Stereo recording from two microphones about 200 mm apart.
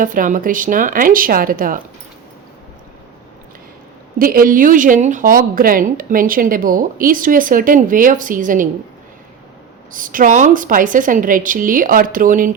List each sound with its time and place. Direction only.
0.0 s a woman's voice: 40° right (ahead or behind)
4.2 s a woman's voice: 45° right (ahead or behind)
9.9 s a woman's voice: 40° right (ahead or behind)